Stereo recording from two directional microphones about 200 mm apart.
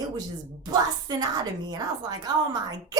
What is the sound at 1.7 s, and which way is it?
A woman's voice, 20° right (ahead or behind).